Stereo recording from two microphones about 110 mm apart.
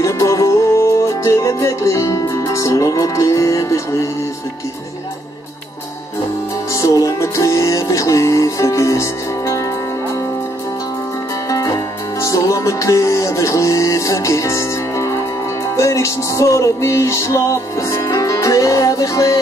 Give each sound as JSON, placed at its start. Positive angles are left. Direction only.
{"t": 0.0, "sound": "music", "side_deg": 30}
{"t": 6.7, "sound": "music", "side_deg": 30}
{"t": 11.4, "sound": "music", "side_deg": 30}